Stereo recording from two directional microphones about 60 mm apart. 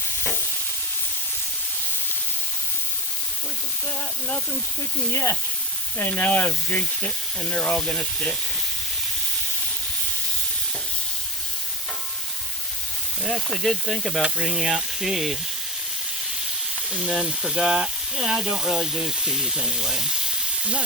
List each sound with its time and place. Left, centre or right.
5.1 s speech: left
6.0 s speech: left
13.5 s speech: centre
14.2 s speech: centre
17.0 s speech: centre